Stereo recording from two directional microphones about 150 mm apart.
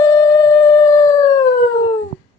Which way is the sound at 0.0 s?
20° left (ahead or behind).